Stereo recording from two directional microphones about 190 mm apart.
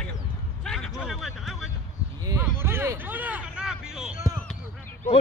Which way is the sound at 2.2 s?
15° right (ahead or behind).